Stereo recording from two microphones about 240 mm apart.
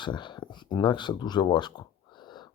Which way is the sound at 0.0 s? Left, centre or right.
Centre.